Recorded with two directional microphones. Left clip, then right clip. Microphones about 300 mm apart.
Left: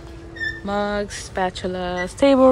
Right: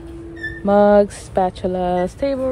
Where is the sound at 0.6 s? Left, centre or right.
Centre.